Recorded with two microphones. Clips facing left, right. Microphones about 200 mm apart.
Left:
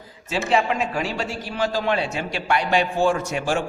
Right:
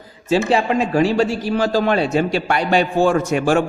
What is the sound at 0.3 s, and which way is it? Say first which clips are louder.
A man's voice: right 5 dB; 35° right (ahead or behind).